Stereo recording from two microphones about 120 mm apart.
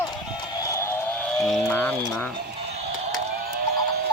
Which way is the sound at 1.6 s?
15° left (ahead or behind).